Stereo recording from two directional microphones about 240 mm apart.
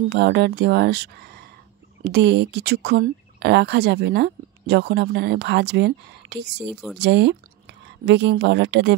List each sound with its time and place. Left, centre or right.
0.1 s speech: right
6.7 s speech: centre
7.0 s speech: right